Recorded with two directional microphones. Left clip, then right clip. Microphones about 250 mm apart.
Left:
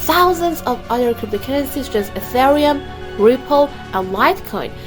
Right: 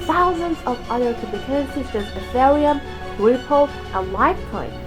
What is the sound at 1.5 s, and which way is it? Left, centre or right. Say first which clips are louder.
A woman's voice: left 3 dB; left.